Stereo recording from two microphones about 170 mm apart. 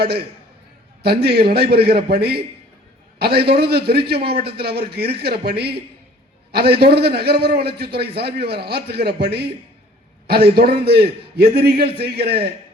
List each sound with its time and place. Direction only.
0.0 s a man's voice: 70° right (ahead or behind)
10.5 s a man's voice: 70° right (ahead or behind)